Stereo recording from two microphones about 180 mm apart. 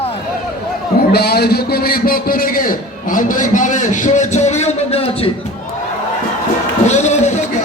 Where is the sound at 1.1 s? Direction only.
60° left (ahead or behind); by 5.3 s 35° left (ahead or behind).